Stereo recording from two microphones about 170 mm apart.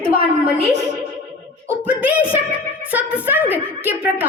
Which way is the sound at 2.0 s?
10° right (ahead or behind).